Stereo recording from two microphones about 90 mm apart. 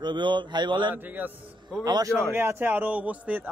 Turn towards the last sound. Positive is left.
turn(degrees=-15)  # may be behind; listen again after turning